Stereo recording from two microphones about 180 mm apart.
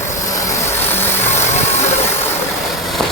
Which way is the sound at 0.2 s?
20° left (ahead or behind).